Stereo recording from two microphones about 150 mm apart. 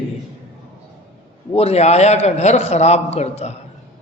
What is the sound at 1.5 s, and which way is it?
A man's voice, 45° left (ahead or behind).